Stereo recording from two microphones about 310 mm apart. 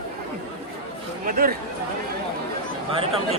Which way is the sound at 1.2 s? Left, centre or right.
Right.